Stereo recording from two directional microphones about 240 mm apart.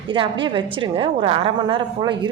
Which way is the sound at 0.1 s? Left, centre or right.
Right.